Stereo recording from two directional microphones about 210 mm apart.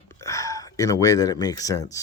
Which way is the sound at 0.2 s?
15° left (ahead or behind).